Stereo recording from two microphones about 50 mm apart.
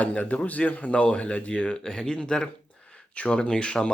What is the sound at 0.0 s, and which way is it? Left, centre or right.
Speech, left.